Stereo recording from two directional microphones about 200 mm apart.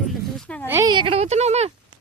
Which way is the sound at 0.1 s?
5° left (ahead or behind).